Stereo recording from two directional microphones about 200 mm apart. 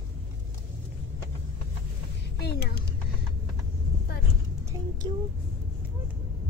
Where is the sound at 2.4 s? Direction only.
55° left (ahead or behind).